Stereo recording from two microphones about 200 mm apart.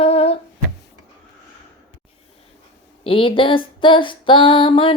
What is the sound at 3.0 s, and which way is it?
Female singing, 25° left (ahead or behind).